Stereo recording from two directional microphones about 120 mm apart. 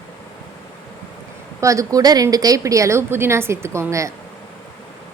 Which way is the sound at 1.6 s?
25° right (ahead or behind).